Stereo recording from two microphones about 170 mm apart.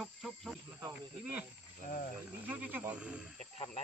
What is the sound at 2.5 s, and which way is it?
Speech, 10° right (ahead or behind).